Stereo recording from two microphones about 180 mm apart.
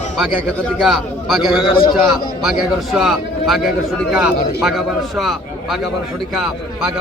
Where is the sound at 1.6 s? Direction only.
25° left (ahead or behind).